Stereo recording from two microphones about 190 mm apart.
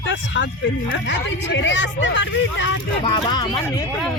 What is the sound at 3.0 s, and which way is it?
Speech, 25° left (ahead or behind).